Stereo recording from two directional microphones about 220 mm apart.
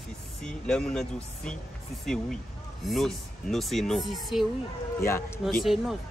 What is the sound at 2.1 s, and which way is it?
Speech, centre (ahead or behind).